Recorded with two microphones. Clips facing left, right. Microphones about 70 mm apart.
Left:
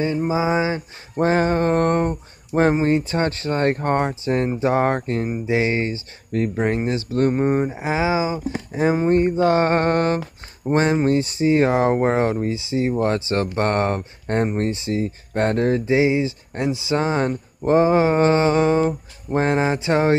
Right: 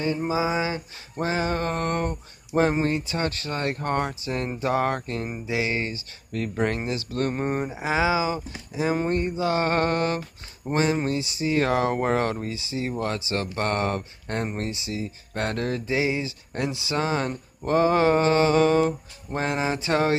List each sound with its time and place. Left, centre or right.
0.3 s speech: left
2.5 s speech: centre
3.1 s speech: left
7.3 s speech: centre
8.5 s a sound: left
11.1 s speech: left
13.6 s a sound: left
14.6 s speech: left